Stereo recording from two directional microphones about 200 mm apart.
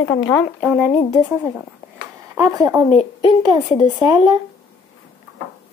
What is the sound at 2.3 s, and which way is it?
Speech, 15° right (ahead or behind).